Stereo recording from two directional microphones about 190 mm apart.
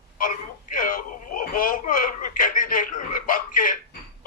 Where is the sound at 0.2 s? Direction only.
45° left (ahead or behind).